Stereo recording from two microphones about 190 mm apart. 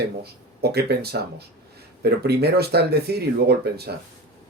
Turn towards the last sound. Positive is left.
turn(degrees=-60)  # may be behind; listen again after turning